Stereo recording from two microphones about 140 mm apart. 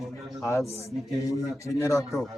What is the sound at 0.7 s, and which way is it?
Speech, 50° left (ahead or behind).